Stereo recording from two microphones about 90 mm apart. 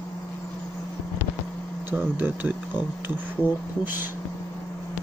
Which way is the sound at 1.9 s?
20° right (ahead or behind).